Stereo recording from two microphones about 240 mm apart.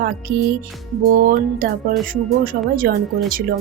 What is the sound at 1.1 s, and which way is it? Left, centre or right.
Speech, right.